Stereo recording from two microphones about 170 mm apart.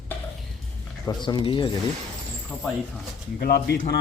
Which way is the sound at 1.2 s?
30° left (ahead or behind).